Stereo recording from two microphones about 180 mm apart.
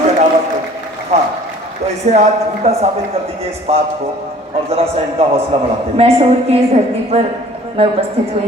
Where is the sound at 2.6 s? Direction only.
35° right (ahead or behind).